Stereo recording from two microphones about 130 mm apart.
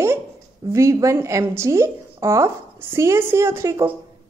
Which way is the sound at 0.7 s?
25° right (ahead or behind).